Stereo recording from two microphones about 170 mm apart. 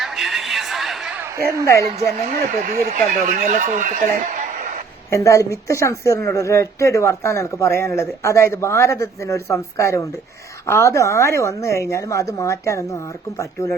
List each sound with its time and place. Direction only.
0.0 s a sound: centre (ahead or behind)
2.2 s a man's voice: 50° right (ahead or behind)
5.1 s speech: 20° left (ahead or behind)